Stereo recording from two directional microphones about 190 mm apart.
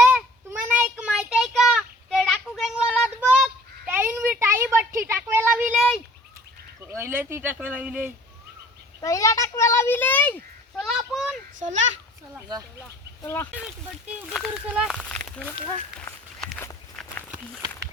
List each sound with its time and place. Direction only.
0.0 s child singing: 5° right (ahead or behind)
6.8 s speech: 10° right (ahead or behind)
9.0 s a sound: 15° left (ahead or behind); by 11.3 s centre (ahead or behind)
11.6 s a child's voice: 40° right (ahead or behind)
13.2 s speech: 15° left (ahead or behind)
14.3 s speech: 5° right (ahead or behind)
16.4 s walk: 5° left (ahead or behind)